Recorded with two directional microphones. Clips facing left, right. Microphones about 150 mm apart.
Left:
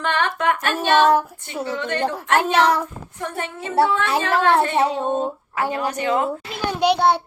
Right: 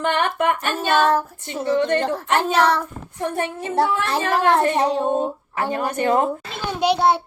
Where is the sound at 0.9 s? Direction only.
5° left (ahead or behind).